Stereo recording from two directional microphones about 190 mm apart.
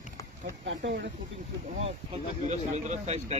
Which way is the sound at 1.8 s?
35° right (ahead or behind).